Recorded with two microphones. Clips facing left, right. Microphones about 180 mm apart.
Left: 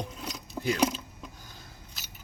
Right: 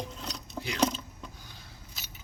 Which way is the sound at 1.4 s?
45° left (ahead or behind).